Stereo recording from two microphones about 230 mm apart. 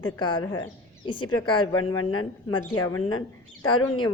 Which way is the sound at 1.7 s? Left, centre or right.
Left.